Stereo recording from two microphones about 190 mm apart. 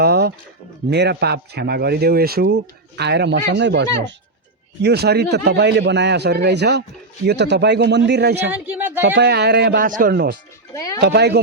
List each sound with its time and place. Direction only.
0.0 s a sound: 55° right (ahead or behind)
0.9 s a man's voice: 60° right (ahead or behind)
8.4 s speech: 10° right (ahead or behind)
9.0 s a man's voice: 65° right (ahead or behind)
10.8 s speech: 20° left (ahead or behind)
11.0 s a man's voice: 60° right (ahead or behind)